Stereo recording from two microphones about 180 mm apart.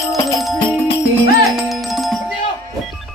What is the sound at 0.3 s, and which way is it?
Music, centre (ahead or behind).